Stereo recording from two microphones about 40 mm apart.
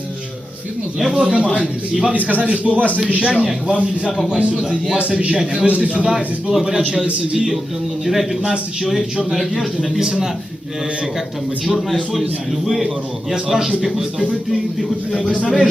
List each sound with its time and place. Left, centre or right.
1.1 s a man's voice: right
6.5 s a man's voice: centre
11.6 s a man's voice: centre
15.1 s speech: left